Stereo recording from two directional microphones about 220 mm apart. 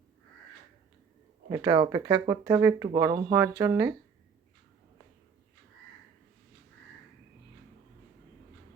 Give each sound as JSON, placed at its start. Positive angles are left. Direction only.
{"t": 1.5, "sound": "speech", "side_deg": -15}